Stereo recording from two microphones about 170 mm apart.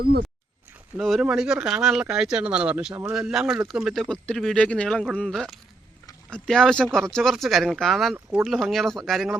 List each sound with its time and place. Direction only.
0.0 s speech: 65° right (ahead or behind)
0.9 s speech: centre (ahead or behind)